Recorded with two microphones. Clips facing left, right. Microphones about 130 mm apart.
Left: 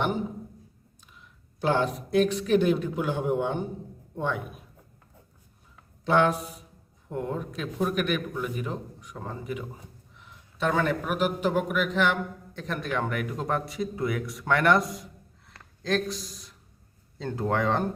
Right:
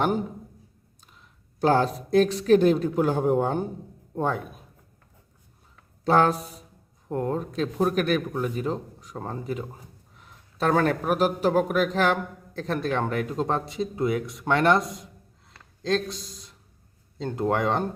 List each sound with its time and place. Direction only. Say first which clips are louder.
1.6 s a man's voice: right 4 dB; 35° right (ahead or behind)
6.1 s a man's voice: right 2 dB; 35° right (ahead or behind)
15.4 s a sound: right 3 dB; 25° right (ahead or behind)
17.2 s speech: right 2 dB; 20° right (ahead or behind)